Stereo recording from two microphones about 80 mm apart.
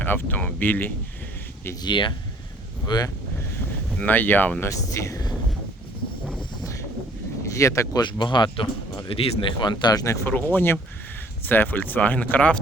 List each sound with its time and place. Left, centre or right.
0.0 s speech: left
1.8 s speech: left
2.8 s speech: left
3.9 s speech: left
4.6 s speech: left
7.4 s a sound: left
7.9 s speech: left
10.0 s speech: left
10.3 s speech: left